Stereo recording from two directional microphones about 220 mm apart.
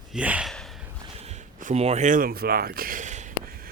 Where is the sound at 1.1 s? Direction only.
30° right (ahead or behind).